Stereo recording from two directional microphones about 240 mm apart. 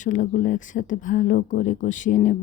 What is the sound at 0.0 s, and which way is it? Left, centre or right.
Speech, left.